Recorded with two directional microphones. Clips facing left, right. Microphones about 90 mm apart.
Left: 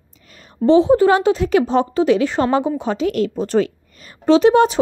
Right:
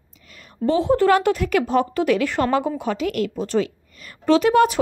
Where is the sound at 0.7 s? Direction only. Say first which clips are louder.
Left 5 dB; 20° left (ahead or behind); by 3.7 s 40° left (ahead or behind).